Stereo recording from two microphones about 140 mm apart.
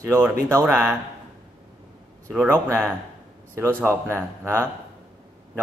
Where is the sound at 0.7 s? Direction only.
10° right (ahead or behind).